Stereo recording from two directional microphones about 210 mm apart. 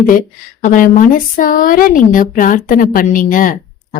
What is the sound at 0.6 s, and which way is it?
Speech, 40° left (ahead or behind).